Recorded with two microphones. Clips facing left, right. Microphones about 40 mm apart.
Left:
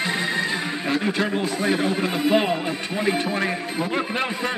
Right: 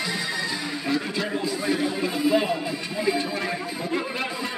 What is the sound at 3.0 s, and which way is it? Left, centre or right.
A man's voice, left.